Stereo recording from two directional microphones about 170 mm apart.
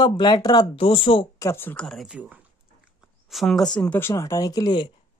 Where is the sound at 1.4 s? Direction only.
15° left (ahead or behind).